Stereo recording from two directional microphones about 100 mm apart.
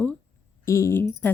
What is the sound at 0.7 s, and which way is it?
Speech, 30° left (ahead or behind).